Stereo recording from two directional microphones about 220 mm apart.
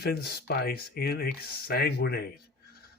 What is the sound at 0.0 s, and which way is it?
Speech, 45° left (ahead or behind).